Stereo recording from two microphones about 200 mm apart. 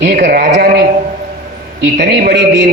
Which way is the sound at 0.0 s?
50° right (ahead or behind).